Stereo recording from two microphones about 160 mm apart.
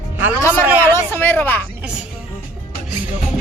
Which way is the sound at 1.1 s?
15° left (ahead or behind).